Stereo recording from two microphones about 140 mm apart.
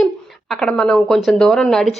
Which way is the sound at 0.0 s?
Centre (ahead or behind).